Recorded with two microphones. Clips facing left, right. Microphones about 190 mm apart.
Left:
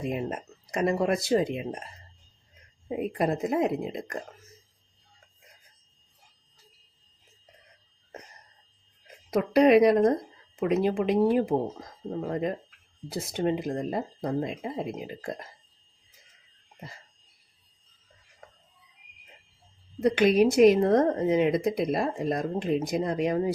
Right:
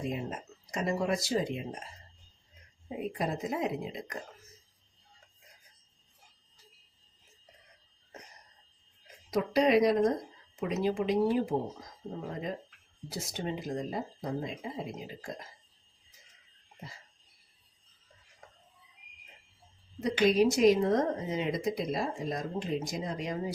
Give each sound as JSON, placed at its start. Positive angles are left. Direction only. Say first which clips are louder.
{"t": 0.1, "sound": "speech", "louder": "left 5 dB", "side_deg": 60}
{"t": 3.0, "sound": "speech", "louder": "left 6 dB", "side_deg": 60}
{"t": 9.3, "sound": "speech", "louder": "left 6 dB", "side_deg": 60}
{"t": 13.1, "sound": "speech", "louder": "left 9 dB", "side_deg": 60}
{"t": 20.0, "sound": "speech", "louder": "left 4 dB", "side_deg": 60}